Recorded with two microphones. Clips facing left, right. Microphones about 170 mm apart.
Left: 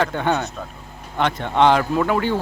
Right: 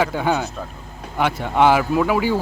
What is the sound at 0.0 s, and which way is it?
Speech, 5° right (ahead or behind).